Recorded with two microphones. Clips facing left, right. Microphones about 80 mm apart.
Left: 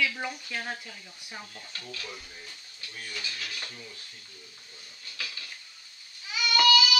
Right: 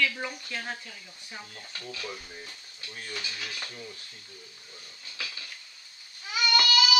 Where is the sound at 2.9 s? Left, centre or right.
Right.